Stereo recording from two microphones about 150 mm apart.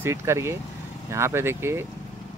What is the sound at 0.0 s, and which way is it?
Speech, 20° right (ahead or behind).